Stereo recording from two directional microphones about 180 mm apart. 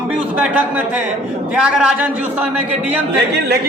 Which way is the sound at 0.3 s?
10° right (ahead or behind).